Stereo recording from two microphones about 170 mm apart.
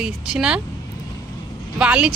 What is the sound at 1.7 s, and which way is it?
Speech, 5° right (ahead or behind).